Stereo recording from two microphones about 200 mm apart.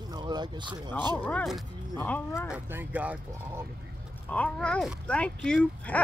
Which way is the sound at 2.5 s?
10° right (ahead or behind).